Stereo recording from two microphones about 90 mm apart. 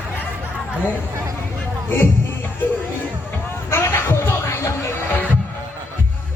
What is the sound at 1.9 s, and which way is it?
Music, 25° left (ahead or behind).